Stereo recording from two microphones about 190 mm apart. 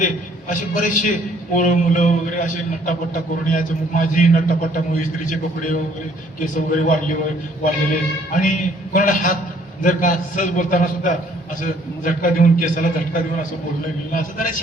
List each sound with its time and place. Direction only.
0.0 s a man's voice: 40° left (ahead or behind)
8.3 s a man's voice: 45° left (ahead or behind)
14.1 s a man's voice: 45° left (ahead or behind)